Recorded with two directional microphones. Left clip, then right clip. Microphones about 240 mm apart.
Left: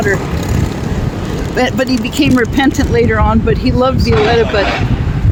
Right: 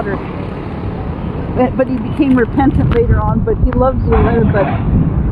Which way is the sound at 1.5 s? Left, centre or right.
Left.